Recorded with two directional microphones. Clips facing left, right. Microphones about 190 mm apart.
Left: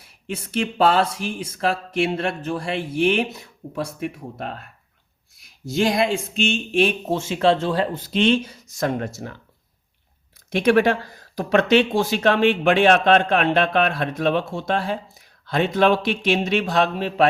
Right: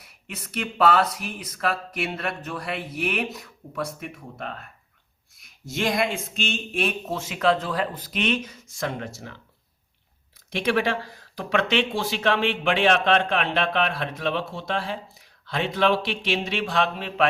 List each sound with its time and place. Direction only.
0.0 s speech: 30° left (ahead or behind)
5.6 s speech: 30° left (ahead or behind)
10.5 s speech: 50° left (ahead or behind)